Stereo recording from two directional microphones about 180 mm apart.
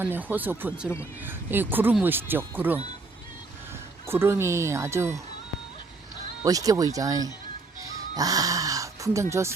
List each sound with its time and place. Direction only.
0.0 s speech: 10° right (ahead or behind)
4.0 s speech: 15° right (ahead or behind)
6.4 s speech: 20° right (ahead or behind)
7.8 s bleat: 20° right (ahead or behind)
9.3 s speech: 15° right (ahead or behind)